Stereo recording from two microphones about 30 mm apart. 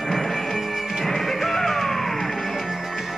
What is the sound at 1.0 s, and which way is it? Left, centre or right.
Music, centre.